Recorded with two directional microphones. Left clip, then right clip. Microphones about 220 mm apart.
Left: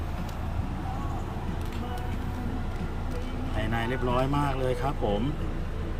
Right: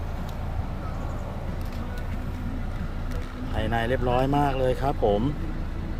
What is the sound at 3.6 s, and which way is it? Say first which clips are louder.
Speech: right 5 dB; 15° right (ahead or behind).